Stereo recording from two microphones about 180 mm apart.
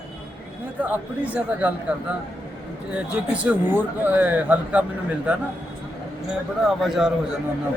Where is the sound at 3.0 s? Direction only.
5° right (ahead or behind).